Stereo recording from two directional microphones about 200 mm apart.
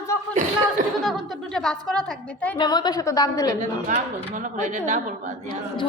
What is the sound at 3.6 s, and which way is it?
Speech, 40° right (ahead or behind).